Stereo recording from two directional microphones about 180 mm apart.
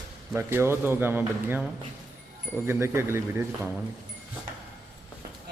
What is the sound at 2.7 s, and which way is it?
Speech, 15° right (ahead or behind).